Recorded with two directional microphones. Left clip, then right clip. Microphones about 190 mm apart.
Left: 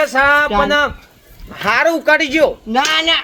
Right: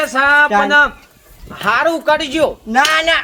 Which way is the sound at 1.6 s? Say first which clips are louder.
Even; 40° left (ahead or behind).